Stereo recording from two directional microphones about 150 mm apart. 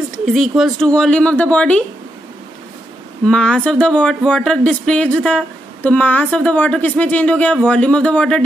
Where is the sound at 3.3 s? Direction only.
5° left (ahead or behind).